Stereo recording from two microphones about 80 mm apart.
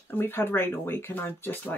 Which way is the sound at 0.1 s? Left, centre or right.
Left.